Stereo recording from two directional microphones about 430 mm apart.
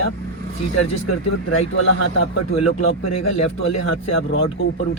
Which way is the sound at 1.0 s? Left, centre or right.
Left.